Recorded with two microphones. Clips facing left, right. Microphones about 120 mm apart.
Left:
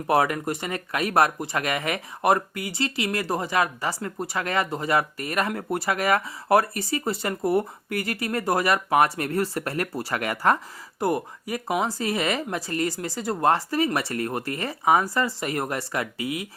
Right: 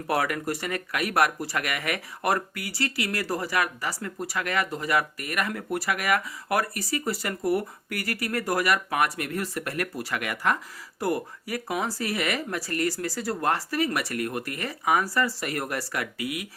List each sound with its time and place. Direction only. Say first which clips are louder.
0.1 s speech: left 4 dB; 25° left (ahead or behind)
11.0 s speech: left 3 dB; 20° left (ahead or behind)